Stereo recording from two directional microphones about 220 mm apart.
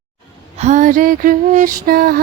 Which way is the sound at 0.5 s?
30° right (ahead or behind).